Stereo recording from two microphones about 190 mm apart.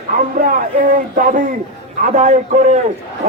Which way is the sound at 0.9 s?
45° right (ahead or behind).